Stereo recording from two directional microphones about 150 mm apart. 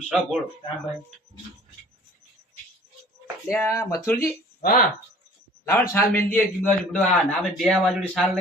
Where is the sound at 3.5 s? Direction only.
20° left (ahead or behind).